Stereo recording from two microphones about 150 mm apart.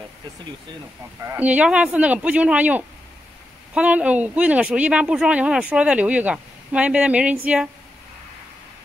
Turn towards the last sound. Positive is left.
turn(degrees=-10)  # may be behind; listen again after turning